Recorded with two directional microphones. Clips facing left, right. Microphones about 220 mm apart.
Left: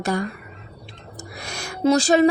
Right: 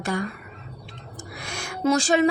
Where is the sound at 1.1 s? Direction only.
40° left (ahead or behind).